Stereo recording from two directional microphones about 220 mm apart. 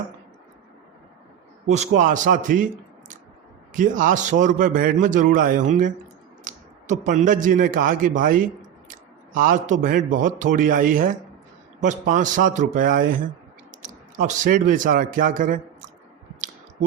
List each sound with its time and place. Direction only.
1.6 s a man's voice: 30° right (ahead or behind)
3.7 s a man's voice: 35° right (ahead or behind)